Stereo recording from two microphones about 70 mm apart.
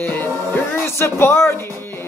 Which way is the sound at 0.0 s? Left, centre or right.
Left.